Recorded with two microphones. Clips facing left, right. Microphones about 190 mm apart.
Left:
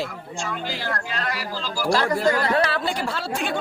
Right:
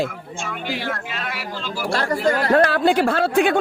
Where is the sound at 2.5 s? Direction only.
50° right (ahead or behind).